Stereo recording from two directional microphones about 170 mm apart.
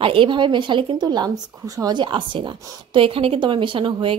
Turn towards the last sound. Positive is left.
turn(degrees=-30)  # may be behind; listen again after turning